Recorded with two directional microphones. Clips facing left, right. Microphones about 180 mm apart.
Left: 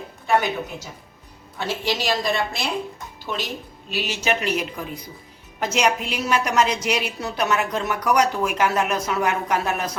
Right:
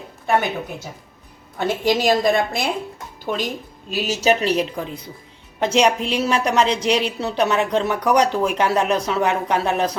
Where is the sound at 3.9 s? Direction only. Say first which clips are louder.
Right 4 dB; 40° right (ahead or behind).